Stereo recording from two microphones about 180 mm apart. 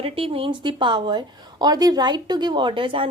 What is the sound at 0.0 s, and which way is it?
A woman's voice, 30° right (ahead or behind).